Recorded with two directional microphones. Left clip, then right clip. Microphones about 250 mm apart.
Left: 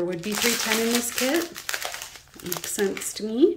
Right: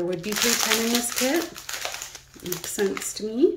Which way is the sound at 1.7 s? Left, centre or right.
Centre.